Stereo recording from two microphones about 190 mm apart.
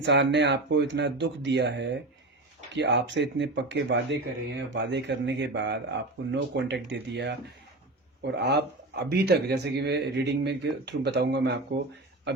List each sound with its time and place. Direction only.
0.0 s speech: 65° right (ahead or behind)